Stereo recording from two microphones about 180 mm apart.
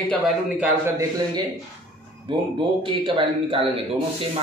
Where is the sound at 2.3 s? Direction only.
25° right (ahead or behind).